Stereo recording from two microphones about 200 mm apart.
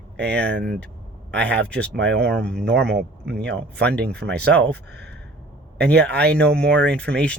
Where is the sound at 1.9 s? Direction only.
60° right (ahead or behind).